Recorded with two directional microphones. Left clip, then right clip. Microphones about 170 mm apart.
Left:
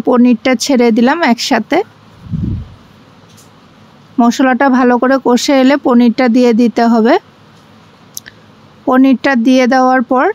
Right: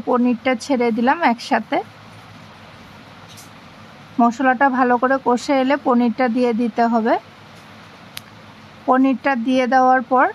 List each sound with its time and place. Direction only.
0.0 s speech: 45° left (ahead or behind)
4.2 s speech: 45° left (ahead or behind)
8.8 s speech: 50° left (ahead or behind)